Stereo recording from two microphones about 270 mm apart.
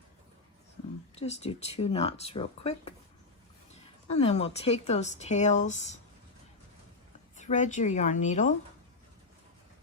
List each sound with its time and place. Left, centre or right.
1.2 s speech: left
4.1 s speech: left
7.3 s speech: left